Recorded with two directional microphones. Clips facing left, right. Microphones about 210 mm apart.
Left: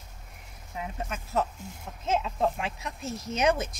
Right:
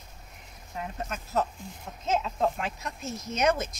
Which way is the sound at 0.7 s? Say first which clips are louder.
Even; 10° left (ahead or behind).